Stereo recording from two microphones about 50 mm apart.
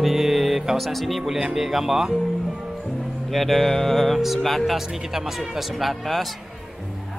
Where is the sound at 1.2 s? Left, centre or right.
Centre.